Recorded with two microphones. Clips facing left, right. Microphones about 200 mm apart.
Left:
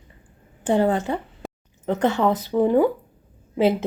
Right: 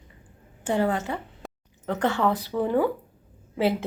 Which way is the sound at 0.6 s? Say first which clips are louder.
Left 5 dB; 30° left (ahead or behind).